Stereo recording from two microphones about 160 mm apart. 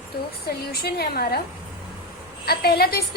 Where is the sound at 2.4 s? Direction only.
75° left (ahead or behind).